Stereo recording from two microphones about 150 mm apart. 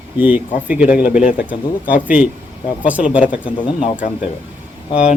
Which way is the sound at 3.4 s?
35° left (ahead or behind).